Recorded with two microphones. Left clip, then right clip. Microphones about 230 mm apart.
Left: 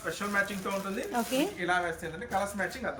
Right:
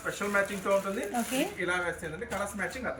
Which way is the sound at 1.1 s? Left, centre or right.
Centre.